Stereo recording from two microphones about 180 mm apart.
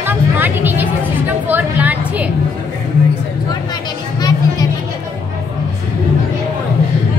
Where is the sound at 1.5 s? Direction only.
10° right (ahead or behind).